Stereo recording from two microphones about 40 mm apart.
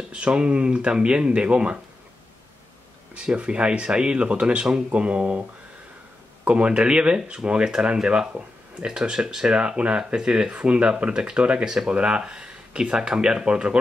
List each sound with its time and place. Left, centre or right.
0.1 s speech: right
3.2 s speech: right
6.4 s speech: right
9.6 s speech: right